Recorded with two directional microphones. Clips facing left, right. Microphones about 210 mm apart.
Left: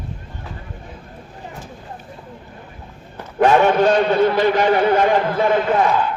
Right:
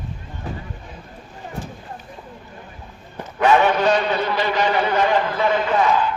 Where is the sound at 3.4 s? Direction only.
45° left (ahead or behind).